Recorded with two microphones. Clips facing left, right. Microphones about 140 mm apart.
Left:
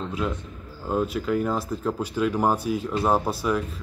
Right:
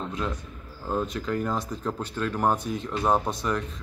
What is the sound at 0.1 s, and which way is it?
Speech, 5° left (ahead or behind).